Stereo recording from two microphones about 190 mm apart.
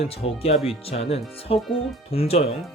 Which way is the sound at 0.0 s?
30° left (ahead or behind).